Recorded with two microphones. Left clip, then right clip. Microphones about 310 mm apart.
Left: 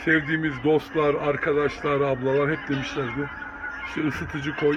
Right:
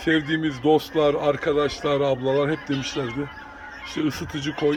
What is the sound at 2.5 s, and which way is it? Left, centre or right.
Speech, centre.